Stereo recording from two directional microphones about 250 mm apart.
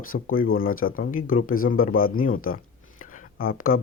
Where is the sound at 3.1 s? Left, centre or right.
Left.